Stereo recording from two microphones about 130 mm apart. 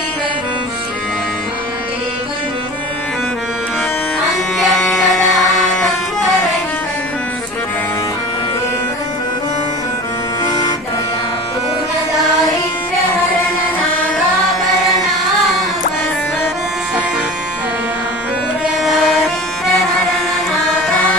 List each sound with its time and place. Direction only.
4.5 s bagpipes: centre (ahead or behind)
5.5 s music: 5° left (ahead or behind)
10.4 s vehicle: 30° left (ahead or behind)
18.8 s a sound: centre (ahead or behind)
20.8 s music: 10° left (ahead or behind)